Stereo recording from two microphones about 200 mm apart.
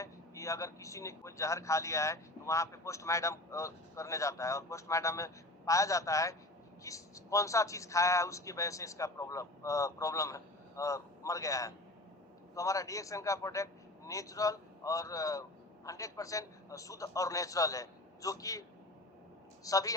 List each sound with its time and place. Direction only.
0.0 s a man's voice: 15° left (ahead or behind)
19.6 s speech: 15° left (ahead or behind)